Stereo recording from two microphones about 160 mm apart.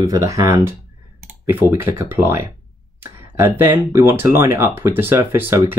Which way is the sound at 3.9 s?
15° right (ahead or behind).